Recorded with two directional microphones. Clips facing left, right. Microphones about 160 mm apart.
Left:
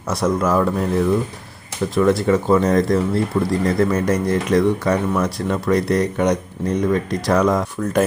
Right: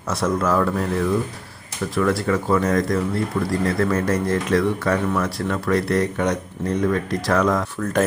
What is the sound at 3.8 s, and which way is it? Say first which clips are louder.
Speech: left 2 dB; 15° left (ahead or behind).